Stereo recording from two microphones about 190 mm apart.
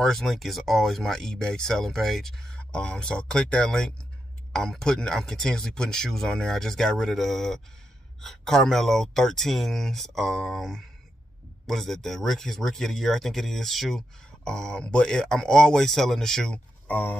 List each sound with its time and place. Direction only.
0.0 s speech: centre (ahead or behind)